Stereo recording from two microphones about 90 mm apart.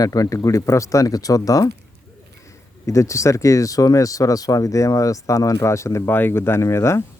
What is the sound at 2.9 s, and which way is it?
Speech, 35° left (ahead or behind).